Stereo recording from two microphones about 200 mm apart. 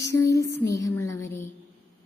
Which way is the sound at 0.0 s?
15° left (ahead or behind).